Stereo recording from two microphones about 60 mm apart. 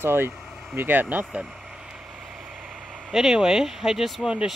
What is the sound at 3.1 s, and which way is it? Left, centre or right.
Speech, centre.